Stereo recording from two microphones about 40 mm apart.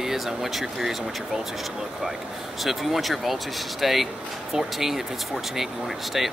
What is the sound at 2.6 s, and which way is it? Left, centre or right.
Speech, centre.